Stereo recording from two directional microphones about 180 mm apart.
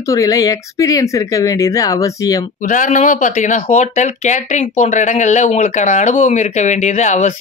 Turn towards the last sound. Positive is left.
turn(degrees=40)  # may be behind; listen again after turning